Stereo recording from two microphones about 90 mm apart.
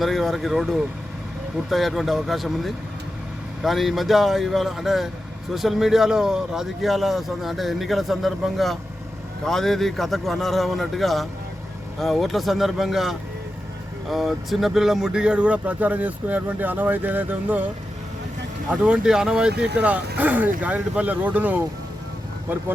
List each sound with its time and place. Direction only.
0.0 s a man's voice: centre (ahead or behind); by 17.7 s 20° right (ahead or behind)
18.7 s speech: 10° right (ahead or behind)